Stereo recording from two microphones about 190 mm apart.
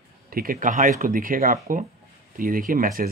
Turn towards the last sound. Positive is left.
turn(degrees=-50)  # may be behind; listen again after turning